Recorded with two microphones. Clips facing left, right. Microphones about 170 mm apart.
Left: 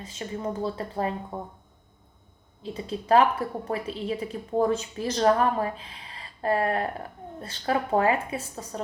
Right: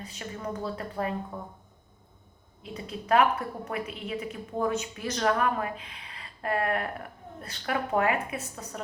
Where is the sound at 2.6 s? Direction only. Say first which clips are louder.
Left 5 dB; 30° left (ahead or behind).